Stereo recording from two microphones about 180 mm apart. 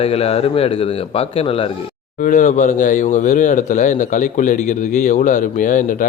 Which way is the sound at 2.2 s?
45° left (ahead or behind).